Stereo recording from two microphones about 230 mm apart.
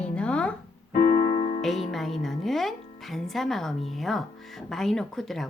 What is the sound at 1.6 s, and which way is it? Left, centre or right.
Music, centre.